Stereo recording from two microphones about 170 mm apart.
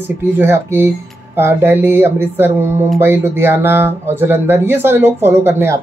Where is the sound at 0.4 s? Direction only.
15° right (ahead or behind).